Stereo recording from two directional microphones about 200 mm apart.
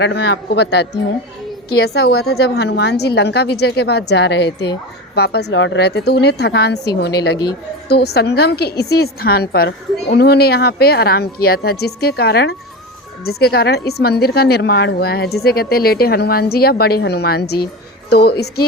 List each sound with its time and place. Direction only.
0.0 s a woman's voice: 55° left (ahead or behind)